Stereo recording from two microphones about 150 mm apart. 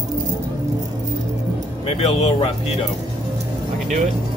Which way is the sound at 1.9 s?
45° left (ahead or behind).